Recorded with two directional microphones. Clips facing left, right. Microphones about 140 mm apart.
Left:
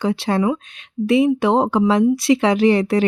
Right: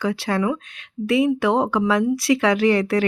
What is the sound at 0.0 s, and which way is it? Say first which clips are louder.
Speech: left 3 dB; 25° left (ahead or behind).